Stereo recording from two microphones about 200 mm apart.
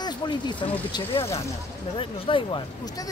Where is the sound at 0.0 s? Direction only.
20° left (ahead or behind).